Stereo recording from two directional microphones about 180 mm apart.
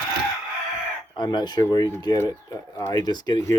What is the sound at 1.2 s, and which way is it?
Speech, 25° left (ahead or behind).